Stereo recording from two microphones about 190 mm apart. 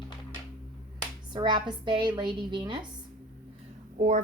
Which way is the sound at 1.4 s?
25° right (ahead or behind).